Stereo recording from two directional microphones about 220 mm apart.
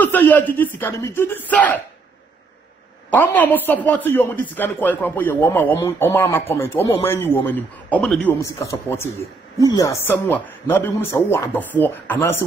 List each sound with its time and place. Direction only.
0.0 s a sound: 10° left (ahead or behind)
0.5 s a man's voice: 10° left (ahead or behind)
3.1 s a man's voice: 10° left (ahead or behind)
6.8 s speech: 25° left (ahead or behind)
7.1 s a man's voice: 10° left (ahead or behind)